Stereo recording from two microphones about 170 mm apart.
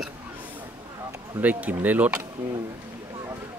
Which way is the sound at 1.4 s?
10° right (ahead or behind).